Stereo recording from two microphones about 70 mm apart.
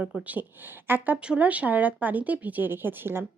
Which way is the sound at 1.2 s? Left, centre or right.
Centre.